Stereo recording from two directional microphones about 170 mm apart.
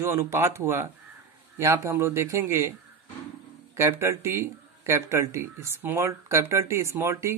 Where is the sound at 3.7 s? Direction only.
15° right (ahead or behind).